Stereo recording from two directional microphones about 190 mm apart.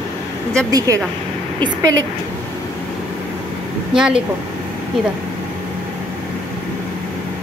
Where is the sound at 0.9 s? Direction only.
15° right (ahead or behind).